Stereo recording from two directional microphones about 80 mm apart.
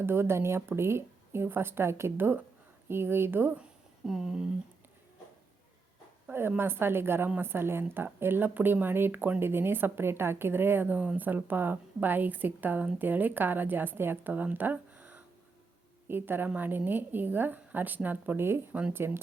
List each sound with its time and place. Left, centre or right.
0.0 s speech: right
3.6 s a sound: centre
6.6 s speech: right
18.7 s speech: centre
18.9 s speech: right